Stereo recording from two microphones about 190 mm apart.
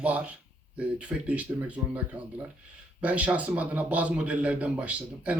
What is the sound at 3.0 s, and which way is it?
Speech, 5° right (ahead or behind).